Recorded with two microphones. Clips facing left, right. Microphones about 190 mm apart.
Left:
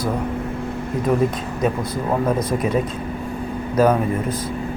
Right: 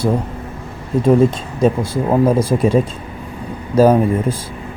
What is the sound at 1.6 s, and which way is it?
Speech, 30° right (ahead or behind).